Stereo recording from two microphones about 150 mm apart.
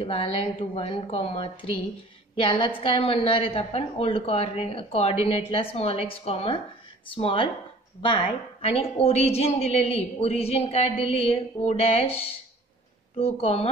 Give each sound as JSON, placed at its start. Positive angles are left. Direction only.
{"t": 0.0, "sound": "a woman's voice", "side_deg": 40}